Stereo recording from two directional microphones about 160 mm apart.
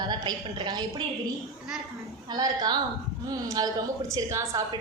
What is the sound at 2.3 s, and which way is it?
A woman's voice, 25° right (ahead or behind).